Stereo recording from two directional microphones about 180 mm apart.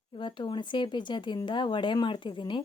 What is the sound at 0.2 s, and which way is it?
Speech, 25° left (ahead or behind).